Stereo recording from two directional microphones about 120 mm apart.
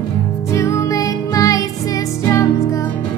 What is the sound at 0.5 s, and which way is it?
Music, 25° left (ahead or behind).